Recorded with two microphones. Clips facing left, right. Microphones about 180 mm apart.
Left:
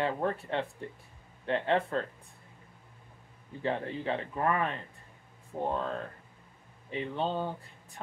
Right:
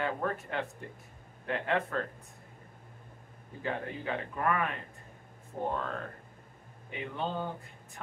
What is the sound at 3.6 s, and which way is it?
Speech, 30° left (ahead or behind).